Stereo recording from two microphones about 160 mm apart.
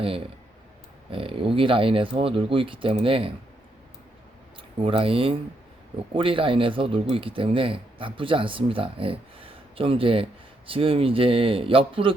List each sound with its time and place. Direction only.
1.1 s speech: 35° right (ahead or behind)
4.8 s speech: 35° right (ahead or behind)